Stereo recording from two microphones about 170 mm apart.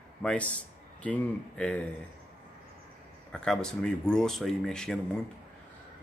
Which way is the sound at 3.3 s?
5° left (ahead or behind).